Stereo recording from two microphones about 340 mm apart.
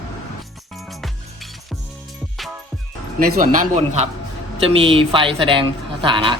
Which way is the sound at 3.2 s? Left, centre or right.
Right.